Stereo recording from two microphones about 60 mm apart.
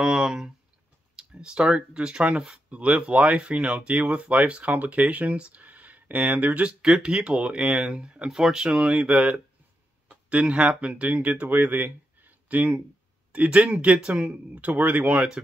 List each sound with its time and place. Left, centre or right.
0.0 s speech: centre; by 6.7 s right
6.8 s speech: centre